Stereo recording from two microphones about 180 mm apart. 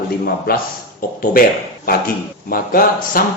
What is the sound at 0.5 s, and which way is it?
Speech, 55° left (ahead or behind).